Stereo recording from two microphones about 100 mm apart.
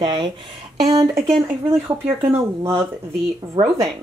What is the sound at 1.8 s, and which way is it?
Speech, 25° right (ahead or behind).